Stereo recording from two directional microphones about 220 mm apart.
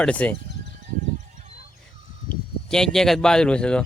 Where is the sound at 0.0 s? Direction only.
5° left (ahead or behind).